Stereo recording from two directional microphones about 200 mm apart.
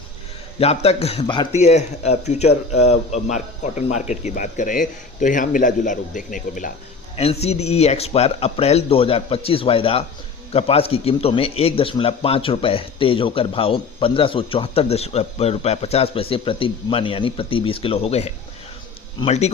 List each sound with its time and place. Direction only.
0.6 s speech: 30° left (ahead or behind)
7.2 s a man's voice: 30° left (ahead or behind)